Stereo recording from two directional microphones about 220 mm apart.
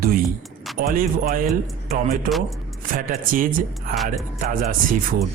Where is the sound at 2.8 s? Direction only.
40° right (ahead or behind).